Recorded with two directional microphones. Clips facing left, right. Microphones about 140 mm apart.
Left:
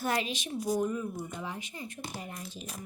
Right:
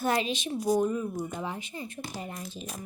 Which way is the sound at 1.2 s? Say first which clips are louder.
Right 4 dB; 40° right (ahead or behind).